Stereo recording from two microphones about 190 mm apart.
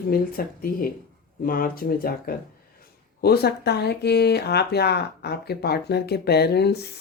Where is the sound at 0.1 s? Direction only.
50° left (ahead or behind).